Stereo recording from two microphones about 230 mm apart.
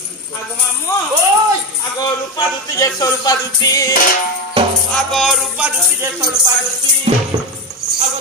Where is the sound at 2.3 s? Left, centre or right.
Centre.